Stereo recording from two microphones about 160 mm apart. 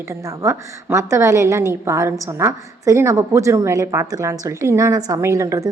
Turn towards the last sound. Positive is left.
turn(degrees=-20)  # may be behind; listen again after turning